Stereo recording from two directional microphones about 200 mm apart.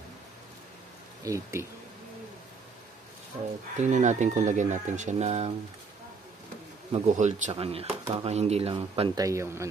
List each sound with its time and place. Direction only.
1.2 s speech: 15° right (ahead or behind)
3.7 s speech: 35° right (ahead or behind)
6.9 s speech: 35° right (ahead or behind); by 9.7 s 15° right (ahead or behind)